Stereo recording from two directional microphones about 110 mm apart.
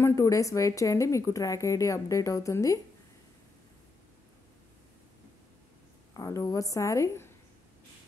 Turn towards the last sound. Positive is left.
turn(degrees=30)  # may be behind; listen again after turning